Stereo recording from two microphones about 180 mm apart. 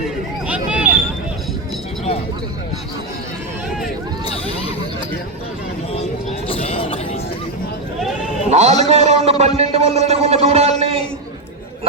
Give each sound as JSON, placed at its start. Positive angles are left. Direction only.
{"t": 0.4, "sound": "vehicle", "side_deg": -5}
{"t": 6.5, "sound": "a sound", "side_deg": 30}
{"t": 8.4, "sound": "a man's voice", "side_deg": -40}